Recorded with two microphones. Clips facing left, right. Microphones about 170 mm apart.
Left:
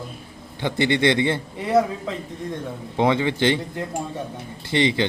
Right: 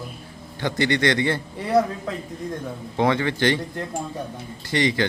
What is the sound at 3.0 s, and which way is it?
Speech, 20° left (ahead or behind).